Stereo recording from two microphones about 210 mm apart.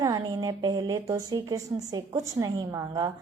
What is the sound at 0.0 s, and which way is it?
Speech, 20° right (ahead or behind).